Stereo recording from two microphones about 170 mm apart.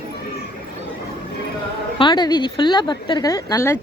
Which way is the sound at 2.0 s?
25° left (ahead or behind).